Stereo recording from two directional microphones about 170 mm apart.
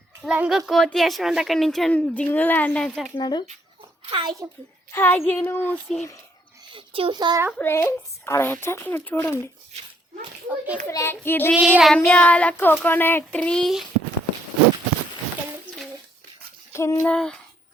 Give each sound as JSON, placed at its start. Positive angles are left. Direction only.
{"t": 0.2, "sound": "speech", "side_deg": -5}
{"t": 3.2, "sound": "speech", "side_deg": 25}
{"t": 4.1, "sound": "a child's voice", "side_deg": -25}
{"t": 4.9, "sound": "speech", "side_deg": 15}
{"t": 6.7, "sound": "a child's voice", "side_deg": -30}
{"t": 7.5, "sound": "speech", "side_deg": 15}
{"t": 10.8, "sound": "speech", "side_deg": 15}
{"t": 11.5, "sound": "speech", "side_deg": -5}
{"t": 16.7, "sound": "a sound", "side_deg": 15}